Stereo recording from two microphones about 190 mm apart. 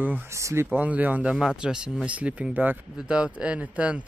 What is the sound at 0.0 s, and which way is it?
Speech, 10° right (ahead or behind).